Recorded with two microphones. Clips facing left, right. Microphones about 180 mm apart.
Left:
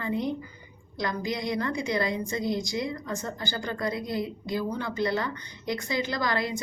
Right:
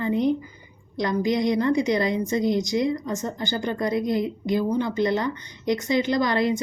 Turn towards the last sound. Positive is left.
turn(degrees=-20)  # may be behind; listen again after turning